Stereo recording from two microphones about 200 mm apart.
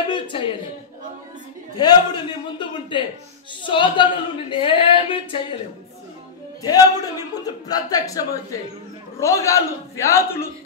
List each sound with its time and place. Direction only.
0.1 s a man's voice: 25° left (ahead or behind)
1.8 s speech: 20° left (ahead or behind)
6.6 s a man's voice: 20° left (ahead or behind)